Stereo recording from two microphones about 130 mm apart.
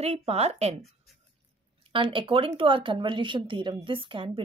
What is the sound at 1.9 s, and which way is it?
A woman's voice, 40° right (ahead or behind).